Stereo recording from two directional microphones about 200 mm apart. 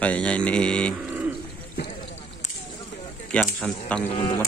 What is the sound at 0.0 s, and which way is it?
Mantra, 5° left (ahead or behind).